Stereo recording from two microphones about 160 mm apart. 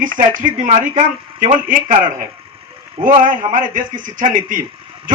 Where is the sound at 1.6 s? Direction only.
55° right (ahead or behind).